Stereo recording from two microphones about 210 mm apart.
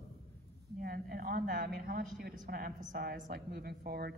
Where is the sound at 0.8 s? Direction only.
45° right (ahead or behind).